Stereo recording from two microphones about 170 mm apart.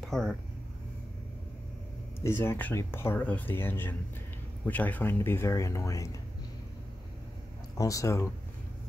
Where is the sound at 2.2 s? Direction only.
15° left (ahead or behind).